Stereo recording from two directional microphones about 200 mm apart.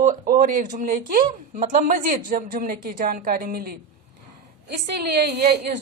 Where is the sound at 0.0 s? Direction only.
45° right (ahead or behind).